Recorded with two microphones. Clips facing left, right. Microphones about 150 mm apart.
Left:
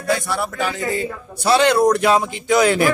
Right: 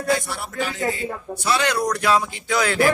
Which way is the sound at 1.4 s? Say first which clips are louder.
Left 8 dB; 30° left (ahead or behind).